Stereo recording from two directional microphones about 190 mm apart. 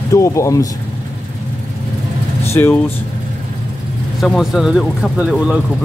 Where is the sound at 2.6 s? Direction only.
15° left (ahead or behind).